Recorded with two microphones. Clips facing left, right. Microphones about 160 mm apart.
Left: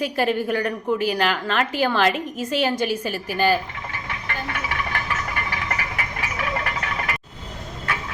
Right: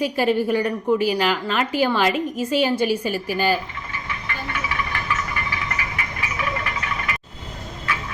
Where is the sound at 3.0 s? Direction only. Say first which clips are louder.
Even; 45° left (ahead or behind).